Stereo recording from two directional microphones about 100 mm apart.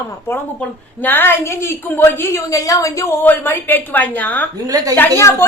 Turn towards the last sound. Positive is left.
turn(degrees=25)  # may be behind; listen again after turning